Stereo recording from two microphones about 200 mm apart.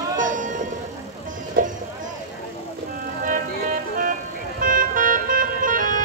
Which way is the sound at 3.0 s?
45° right (ahead or behind).